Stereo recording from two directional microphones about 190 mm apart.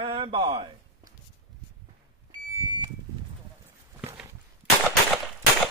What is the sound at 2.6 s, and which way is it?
Vehicle, 20° right (ahead or behind).